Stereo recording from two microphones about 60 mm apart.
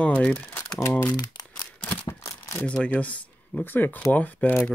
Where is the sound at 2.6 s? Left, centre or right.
Left.